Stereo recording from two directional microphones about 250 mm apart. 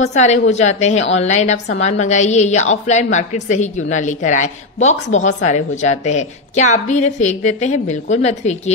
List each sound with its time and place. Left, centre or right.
0.0 s a woman's voice: left